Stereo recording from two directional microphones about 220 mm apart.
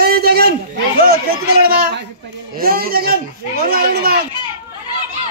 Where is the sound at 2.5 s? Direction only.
40° right (ahead or behind).